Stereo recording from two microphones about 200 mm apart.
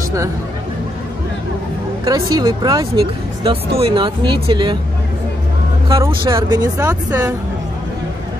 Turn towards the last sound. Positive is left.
turn(degrees=-15)  # may be behind; listen again after turning